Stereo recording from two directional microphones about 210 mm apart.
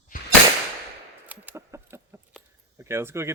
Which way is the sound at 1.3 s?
10° right (ahead or behind).